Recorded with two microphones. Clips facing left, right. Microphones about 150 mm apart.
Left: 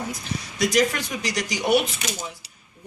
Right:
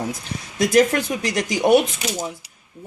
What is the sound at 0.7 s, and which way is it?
Speech, 50° right (ahead or behind).